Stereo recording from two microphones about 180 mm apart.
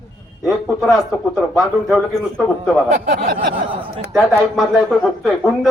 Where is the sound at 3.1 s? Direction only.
55° right (ahead or behind).